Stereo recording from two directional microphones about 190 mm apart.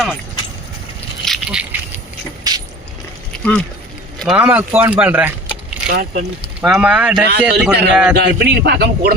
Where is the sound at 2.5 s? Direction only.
20° right (ahead or behind).